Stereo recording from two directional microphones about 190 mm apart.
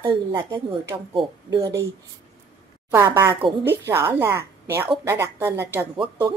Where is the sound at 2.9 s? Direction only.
15° right (ahead or behind).